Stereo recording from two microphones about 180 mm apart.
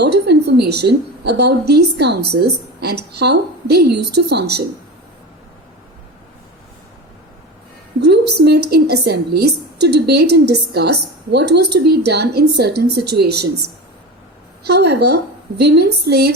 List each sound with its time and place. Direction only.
0.0 s a woman's voice: 65° right (ahead or behind)
8.0 s a woman's voice: 65° right (ahead or behind)